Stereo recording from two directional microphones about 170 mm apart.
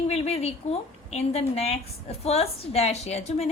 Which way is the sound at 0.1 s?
40° left (ahead or behind).